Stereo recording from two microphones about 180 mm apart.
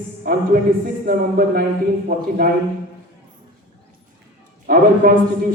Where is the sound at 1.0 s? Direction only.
55° right (ahead or behind).